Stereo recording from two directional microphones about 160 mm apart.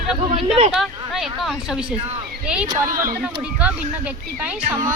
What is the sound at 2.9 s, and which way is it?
Speech, 60° right (ahead or behind).